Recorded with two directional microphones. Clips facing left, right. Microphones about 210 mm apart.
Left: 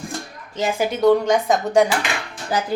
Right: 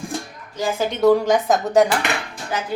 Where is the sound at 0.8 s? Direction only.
Centre (ahead or behind).